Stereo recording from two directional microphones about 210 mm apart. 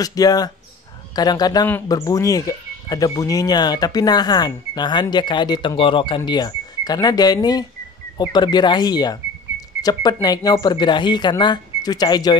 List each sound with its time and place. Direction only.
0.0 s speech: 15° left (ahead or behind)